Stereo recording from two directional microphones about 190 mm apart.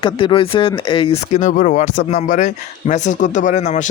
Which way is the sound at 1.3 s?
40° left (ahead or behind).